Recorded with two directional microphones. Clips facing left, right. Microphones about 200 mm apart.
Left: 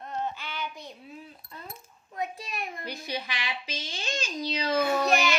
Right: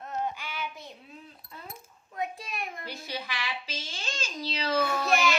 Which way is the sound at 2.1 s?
Centre (ahead or behind).